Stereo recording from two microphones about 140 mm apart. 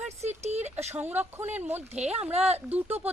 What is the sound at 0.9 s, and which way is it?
Speech, 10° right (ahead or behind).